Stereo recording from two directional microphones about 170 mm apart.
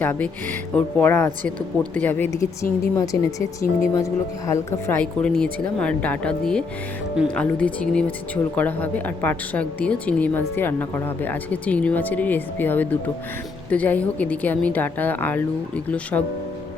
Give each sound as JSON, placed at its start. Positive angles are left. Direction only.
{"t": 0.0, "sound": "a woman's voice", "side_deg": 10}